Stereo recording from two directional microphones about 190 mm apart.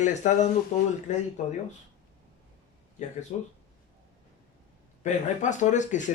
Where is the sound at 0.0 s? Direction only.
40° left (ahead or behind).